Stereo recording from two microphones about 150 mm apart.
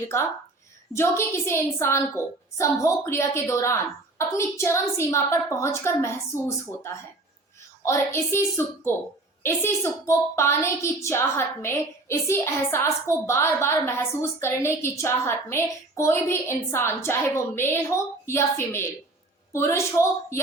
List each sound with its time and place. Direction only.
0.9 s a woman's voice: 15° left (ahead or behind)
7.9 s a woman's voice: 15° left (ahead or behind)